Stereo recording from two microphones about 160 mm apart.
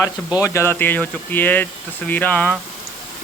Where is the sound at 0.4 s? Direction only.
15° left (ahead or behind).